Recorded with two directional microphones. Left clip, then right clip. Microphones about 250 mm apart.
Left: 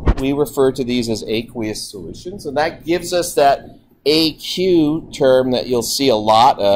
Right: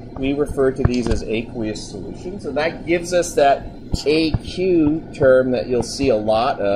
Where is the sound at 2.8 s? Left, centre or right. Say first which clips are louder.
Even; left.